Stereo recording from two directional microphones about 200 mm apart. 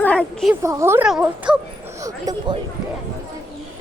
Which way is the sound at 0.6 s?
15° right (ahead or behind).